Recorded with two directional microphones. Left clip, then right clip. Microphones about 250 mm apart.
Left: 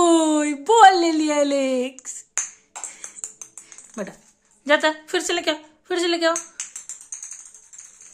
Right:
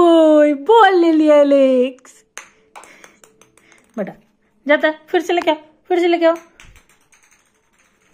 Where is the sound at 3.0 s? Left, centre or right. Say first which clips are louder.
Left 6 dB; right.